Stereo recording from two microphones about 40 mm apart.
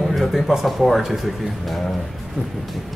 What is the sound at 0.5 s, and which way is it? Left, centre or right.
Speech, centre.